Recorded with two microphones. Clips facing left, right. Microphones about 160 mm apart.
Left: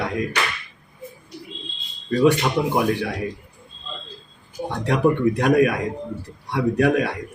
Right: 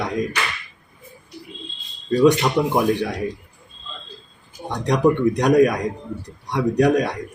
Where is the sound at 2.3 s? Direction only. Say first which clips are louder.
Right 2 dB; 15° right (ahead or behind).